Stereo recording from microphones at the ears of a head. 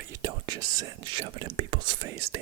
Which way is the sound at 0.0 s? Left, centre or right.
Right.